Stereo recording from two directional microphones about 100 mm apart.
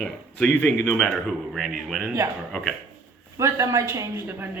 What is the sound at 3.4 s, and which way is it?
A woman's voice, 30° right (ahead or behind).